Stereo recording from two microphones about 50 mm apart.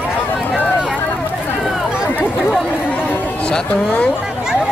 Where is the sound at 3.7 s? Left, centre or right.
Left.